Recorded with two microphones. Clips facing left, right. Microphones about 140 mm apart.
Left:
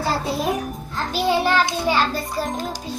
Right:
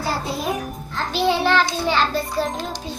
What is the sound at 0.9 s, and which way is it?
A child's voice, 10° left (ahead or behind).